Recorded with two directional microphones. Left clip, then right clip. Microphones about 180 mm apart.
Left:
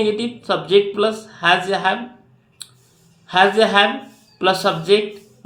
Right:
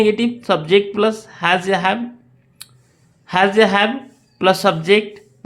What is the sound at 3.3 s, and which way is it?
Speech, 40° right (ahead or behind).